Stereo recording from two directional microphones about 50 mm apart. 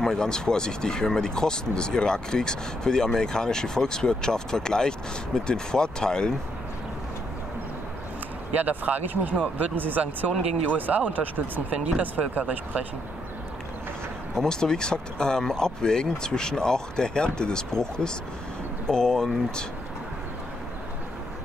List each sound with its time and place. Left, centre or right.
0.0 s speech: centre
8.5 s speech: right
10.3 s speech: centre
10.8 s speech: right
14.3 s speech: centre
18.9 s speech: centre